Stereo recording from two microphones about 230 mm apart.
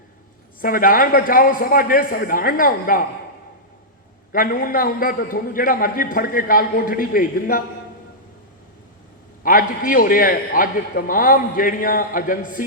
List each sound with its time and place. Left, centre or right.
0.6 s a man's voice: left
4.3 s a man's voice: left
9.4 s a man's voice: left